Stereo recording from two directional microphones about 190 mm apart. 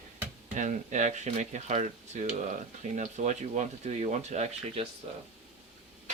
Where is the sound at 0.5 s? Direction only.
40° right (ahead or behind).